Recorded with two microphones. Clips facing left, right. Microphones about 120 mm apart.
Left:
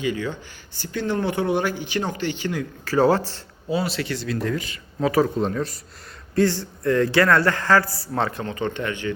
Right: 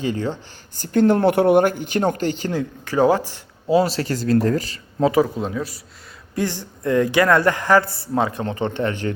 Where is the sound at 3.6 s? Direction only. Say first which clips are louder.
Right 7 dB; 40° right (ahead or behind).